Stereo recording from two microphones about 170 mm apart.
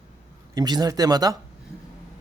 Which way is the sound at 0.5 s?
25° right (ahead or behind).